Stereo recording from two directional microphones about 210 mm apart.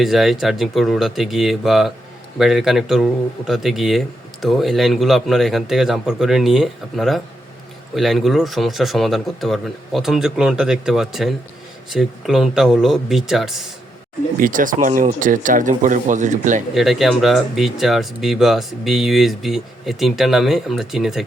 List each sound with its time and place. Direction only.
0.0 s a man's voice: centre (ahead or behind)
14.3 s speech: 40° right (ahead or behind)
16.7 s a man's voice: centre (ahead or behind)